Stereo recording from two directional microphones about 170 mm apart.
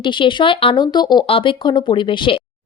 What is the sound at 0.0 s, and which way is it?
Speech, 30° left (ahead or behind).